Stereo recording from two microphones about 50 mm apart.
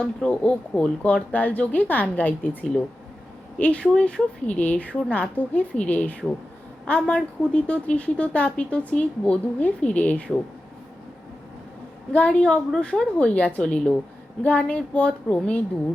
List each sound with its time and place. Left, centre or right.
0.0 s a woman's voice: left
12.1 s a woman's voice: left
12.4 s a woman's voice: centre